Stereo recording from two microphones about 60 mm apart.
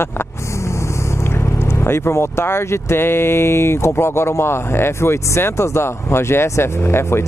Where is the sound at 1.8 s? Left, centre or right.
Left.